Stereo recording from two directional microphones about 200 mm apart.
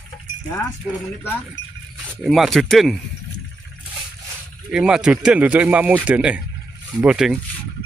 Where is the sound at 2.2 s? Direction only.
Centre (ahead or behind).